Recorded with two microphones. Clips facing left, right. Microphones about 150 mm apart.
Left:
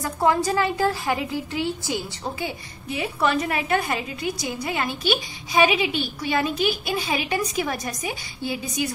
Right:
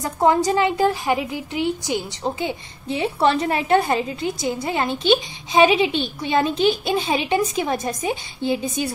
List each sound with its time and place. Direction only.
0.0 s a woman's voice: 20° right (ahead or behind)